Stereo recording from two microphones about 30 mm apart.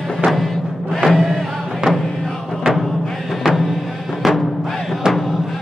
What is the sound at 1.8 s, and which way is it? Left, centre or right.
Music, right.